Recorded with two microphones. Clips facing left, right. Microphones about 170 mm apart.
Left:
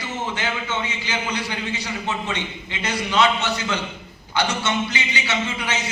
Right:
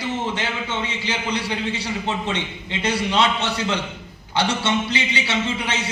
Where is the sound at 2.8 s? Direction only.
30° right (ahead or behind).